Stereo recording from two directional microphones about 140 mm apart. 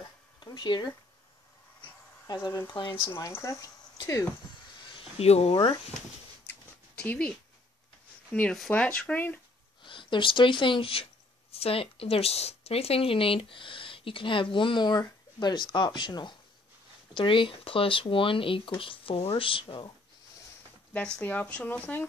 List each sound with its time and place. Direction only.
0.4 s speech: 30° left (ahead or behind)
1.8 s a sound: 25° left (ahead or behind)
3.1 s speech: 20° left (ahead or behind)
4.9 s speech: 45° left (ahead or behind)
7.0 s speech: 10° left (ahead or behind)
9.8 s speech: 35° left (ahead or behind)
20.9 s speech: 10° left (ahead or behind)